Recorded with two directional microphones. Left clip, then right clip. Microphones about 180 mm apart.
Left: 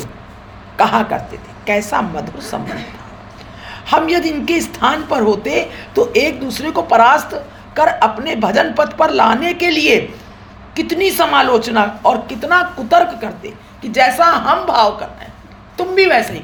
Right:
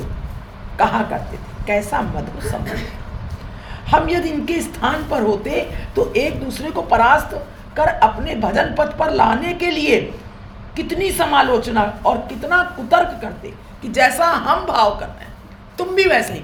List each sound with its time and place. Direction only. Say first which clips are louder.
0.8 s a woman's voice: left 4 dB; 20° left (ahead or behind)
3.7 s a woman's voice: left 2 dB; 20° left (ahead or behind)
13.8 s a woman's voice: left 4 dB; 10° left (ahead or behind)